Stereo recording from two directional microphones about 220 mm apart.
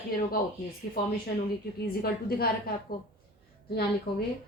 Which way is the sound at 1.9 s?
45° left (ahead or behind).